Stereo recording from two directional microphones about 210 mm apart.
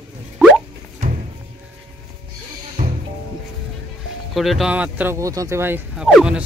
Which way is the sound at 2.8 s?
30° right (ahead or behind).